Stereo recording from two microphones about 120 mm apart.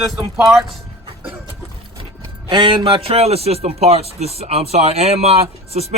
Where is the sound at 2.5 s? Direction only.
40° right (ahead or behind).